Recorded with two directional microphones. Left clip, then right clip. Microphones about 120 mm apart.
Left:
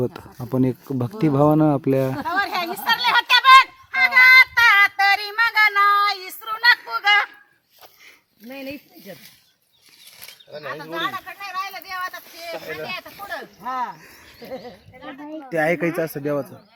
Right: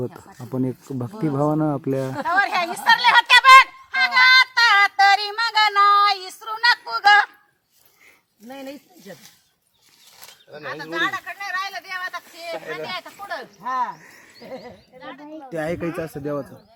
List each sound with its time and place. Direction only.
0.5 s speech: 25° left (ahead or behind)
2.2 s a sound: 5° left (ahead or behind)
3.9 s child singing: 10° right (ahead or behind)
8.4 s speech: centre (ahead or behind)
10.6 s speech: centre (ahead or behind)
12.9 s speech: 65° left (ahead or behind); by 15.3 s 45° left (ahead or behind)
15.4 s a man's voice: 10° left (ahead or behind)